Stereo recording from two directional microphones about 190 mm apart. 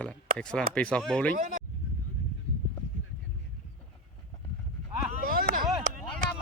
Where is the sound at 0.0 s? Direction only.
5° left (ahead or behind).